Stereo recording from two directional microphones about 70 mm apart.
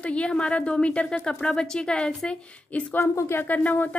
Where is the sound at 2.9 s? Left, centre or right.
Left.